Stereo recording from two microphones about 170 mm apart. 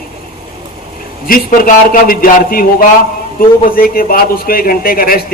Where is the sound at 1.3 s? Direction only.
55° left (ahead or behind).